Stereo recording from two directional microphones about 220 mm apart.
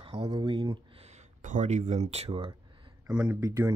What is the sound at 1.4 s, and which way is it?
Speech, 35° right (ahead or behind).